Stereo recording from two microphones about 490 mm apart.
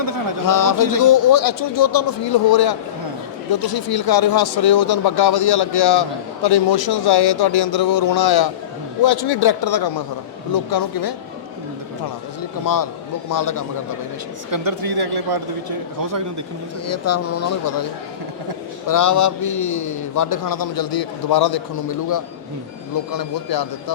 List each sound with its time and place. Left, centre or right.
0.4 s a man's voice: left
12.6 s a man's voice: left
14.5 s speech: right
16.9 s a man's voice: left
18.9 s a man's voice: left